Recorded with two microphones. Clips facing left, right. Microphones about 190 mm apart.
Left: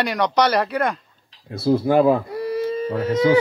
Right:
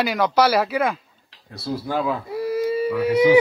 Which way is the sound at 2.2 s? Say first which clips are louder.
Right 1 dB; 5° right (ahead or behind).